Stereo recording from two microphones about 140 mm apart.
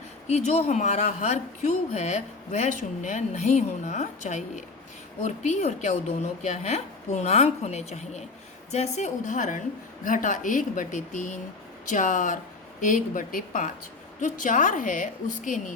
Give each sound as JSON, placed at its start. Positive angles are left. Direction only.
{"t": 0.3, "sound": "a woman's voice", "side_deg": 50}